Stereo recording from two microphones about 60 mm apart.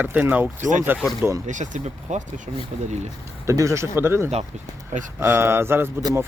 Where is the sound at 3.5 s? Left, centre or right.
Right.